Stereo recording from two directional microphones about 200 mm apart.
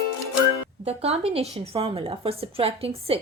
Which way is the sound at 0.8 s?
30° right (ahead or behind).